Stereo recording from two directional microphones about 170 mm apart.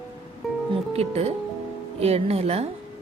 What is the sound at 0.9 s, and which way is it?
A woman's voice, 35° right (ahead or behind).